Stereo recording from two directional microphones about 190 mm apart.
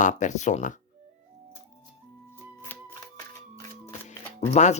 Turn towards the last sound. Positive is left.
turn(degrees=35)  # may be behind; listen again after turning